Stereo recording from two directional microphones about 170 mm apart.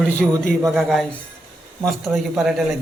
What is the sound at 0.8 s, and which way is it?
Speech, centre (ahead or behind).